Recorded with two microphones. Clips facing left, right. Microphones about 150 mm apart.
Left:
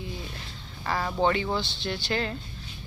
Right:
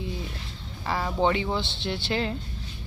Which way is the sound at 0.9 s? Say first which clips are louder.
Right 1 dB; centre (ahead or behind).